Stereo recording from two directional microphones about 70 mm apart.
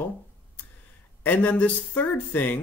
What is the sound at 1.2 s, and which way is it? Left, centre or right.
Speech, left.